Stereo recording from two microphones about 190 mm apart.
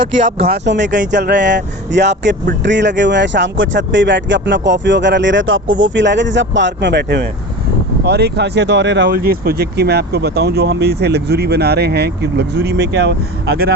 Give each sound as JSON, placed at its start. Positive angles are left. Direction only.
{"t": 0.4, "sound": "speech", "side_deg": -60}
{"t": 0.9, "sound": "music", "side_deg": -40}
{"t": 1.3, "sound": "speech", "side_deg": -65}
{"t": 5.8, "sound": "speech", "side_deg": -70}